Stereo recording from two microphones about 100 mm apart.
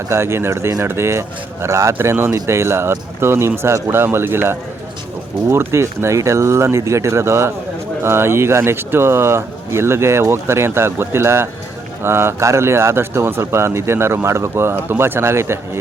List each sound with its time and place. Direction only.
0.1 s speech: 25° right (ahead or behind)